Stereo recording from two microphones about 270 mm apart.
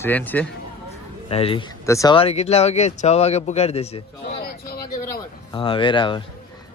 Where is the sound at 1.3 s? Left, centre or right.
Left.